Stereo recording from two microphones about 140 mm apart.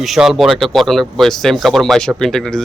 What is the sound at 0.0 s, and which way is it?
Speech, centre (ahead or behind).